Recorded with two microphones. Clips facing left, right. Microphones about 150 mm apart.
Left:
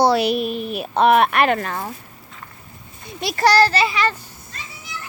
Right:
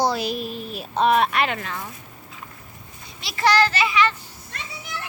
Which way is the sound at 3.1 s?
50° left (ahead or behind).